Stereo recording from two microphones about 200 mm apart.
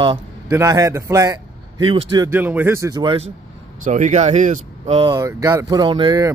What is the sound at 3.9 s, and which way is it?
Speech, 35° right (ahead or behind).